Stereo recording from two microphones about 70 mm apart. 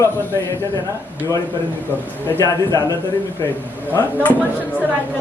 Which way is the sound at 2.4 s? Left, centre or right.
Left.